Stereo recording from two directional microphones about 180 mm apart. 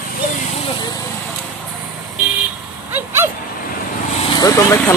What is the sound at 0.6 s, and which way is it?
Vehicle, 25° left (ahead or behind).